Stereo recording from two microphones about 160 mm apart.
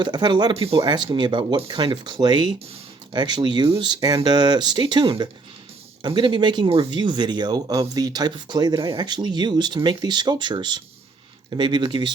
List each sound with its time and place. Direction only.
0.0 s speech: 30° right (ahead or behind)